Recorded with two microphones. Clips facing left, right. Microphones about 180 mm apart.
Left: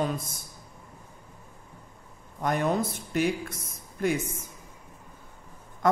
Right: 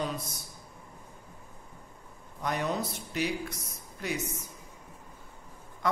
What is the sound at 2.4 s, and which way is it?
A man's voice, 50° left (ahead or behind).